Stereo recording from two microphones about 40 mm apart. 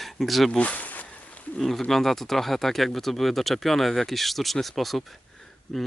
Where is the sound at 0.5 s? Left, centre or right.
Left.